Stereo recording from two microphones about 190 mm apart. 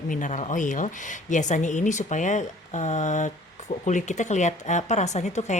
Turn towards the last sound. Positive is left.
turn(degrees=35)  # may be behind; listen again after turning